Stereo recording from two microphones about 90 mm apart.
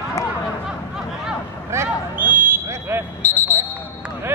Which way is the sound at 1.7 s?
25° right (ahead or behind).